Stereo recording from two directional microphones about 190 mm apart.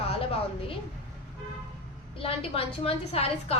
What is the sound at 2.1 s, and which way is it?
A woman's voice, 30° left (ahead or behind).